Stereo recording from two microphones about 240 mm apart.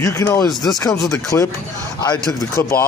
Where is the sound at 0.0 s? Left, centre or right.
Centre.